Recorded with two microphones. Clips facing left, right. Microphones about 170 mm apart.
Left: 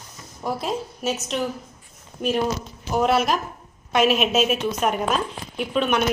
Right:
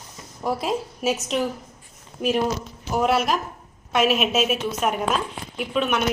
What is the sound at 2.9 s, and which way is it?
A woman's voice, 5° right (ahead or behind).